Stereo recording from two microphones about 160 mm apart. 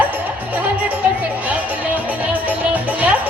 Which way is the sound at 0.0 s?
10° right (ahead or behind).